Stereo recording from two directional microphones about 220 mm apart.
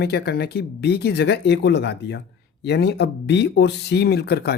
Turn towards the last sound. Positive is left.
turn(degrees=45)  # may be behind; listen again after turning